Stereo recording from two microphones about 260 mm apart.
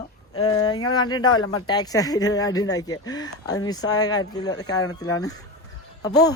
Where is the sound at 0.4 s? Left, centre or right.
Centre.